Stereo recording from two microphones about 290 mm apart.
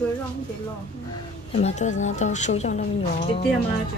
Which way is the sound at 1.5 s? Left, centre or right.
Left.